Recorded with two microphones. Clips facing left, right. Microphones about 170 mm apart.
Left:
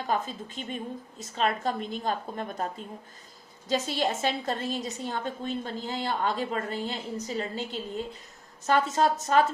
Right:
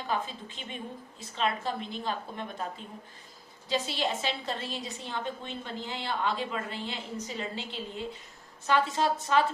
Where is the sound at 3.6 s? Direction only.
45° left (ahead or behind).